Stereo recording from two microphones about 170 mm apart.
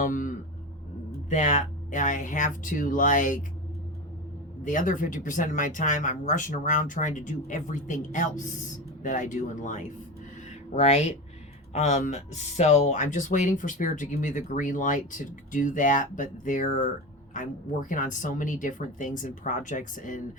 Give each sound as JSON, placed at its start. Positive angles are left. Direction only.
{"t": 0.0, "sound": "a sound", "side_deg": 50}
{"t": 1.3, "sound": "speech", "side_deg": 50}
{"t": 4.6, "sound": "speech", "side_deg": 50}